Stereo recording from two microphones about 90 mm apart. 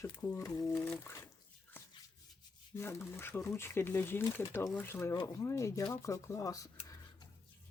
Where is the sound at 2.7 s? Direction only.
30° left (ahead or behind).